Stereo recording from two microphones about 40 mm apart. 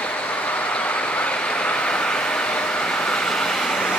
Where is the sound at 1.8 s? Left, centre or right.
Left.